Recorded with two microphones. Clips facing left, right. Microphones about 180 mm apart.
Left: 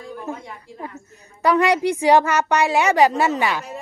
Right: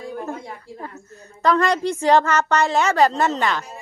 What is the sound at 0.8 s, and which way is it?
A woman's voice, 10° left (ahead or behind).